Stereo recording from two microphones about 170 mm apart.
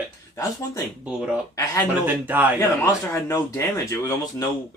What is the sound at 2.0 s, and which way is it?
Speech, 10° right (ahead or behind).